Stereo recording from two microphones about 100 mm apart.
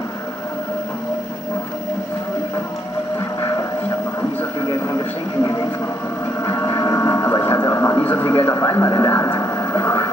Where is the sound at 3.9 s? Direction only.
30° left (ahead or behind).